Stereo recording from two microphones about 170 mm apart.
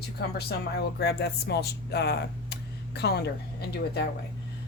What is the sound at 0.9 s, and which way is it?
Speech, 70° left (ahead or behind).